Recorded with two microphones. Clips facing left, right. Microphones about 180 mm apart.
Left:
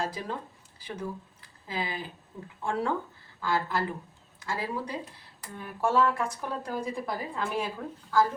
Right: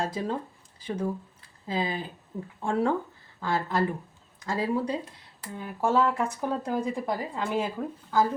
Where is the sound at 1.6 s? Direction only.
30° right (ahead or behind).